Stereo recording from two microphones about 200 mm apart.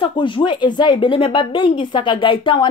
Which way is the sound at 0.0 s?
25° left (ahead or behind).